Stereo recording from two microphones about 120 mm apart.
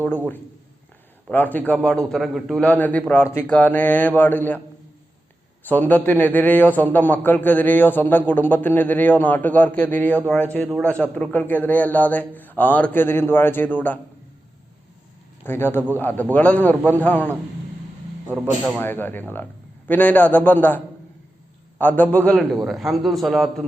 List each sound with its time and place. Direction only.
1.3 s a man's voice: 15° left (ahead or behind)
5.6 s a man's voice: 15° left (ahead or behind)
15.4 s a man's voice: 20° left (ahead or behind)
18.3 s a man's voice: 5° right (ahead or behind)
18.8 s a man's voice: 15° left (ahead or behind)
22.6 s a man's voice: centre (ahead or behind)